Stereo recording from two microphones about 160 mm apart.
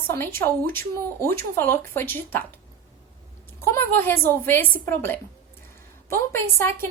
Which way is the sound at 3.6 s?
15° left (ahead or behind).